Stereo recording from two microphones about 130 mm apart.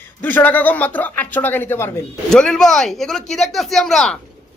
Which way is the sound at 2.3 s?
5° left (ahead or behind).